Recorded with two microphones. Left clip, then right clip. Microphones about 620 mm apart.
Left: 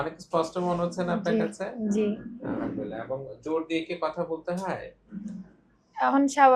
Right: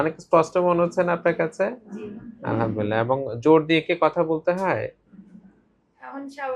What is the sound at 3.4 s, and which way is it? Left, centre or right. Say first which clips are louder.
Speech: right 12 dB; right.